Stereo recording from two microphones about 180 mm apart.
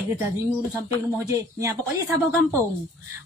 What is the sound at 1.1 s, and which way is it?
Speech, 20° right (ahead or behind).